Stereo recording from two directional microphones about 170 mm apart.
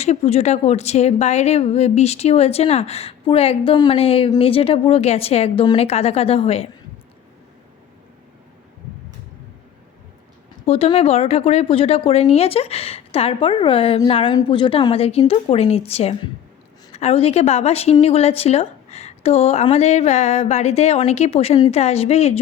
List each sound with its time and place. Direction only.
0.0 s speech: 40° left (ahead or behind)
10.7 s a woman's voice: 35° left (ahead or behind)